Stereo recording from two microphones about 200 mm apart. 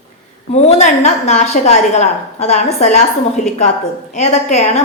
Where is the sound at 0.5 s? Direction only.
35° left (ahead or behind).